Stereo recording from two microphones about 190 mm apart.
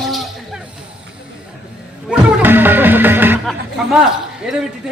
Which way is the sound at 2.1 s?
10° right (ahead or behind).